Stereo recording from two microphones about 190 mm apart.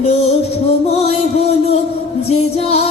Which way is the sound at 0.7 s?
35° left (ahead or behind).